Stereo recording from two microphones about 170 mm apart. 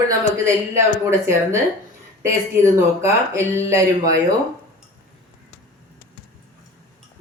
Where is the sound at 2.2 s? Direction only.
15° right (ahead or behind).